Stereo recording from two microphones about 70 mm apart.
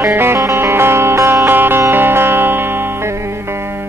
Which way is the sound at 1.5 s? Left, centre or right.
Right.